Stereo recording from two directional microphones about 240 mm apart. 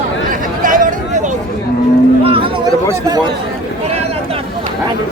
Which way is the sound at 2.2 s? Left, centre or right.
Right.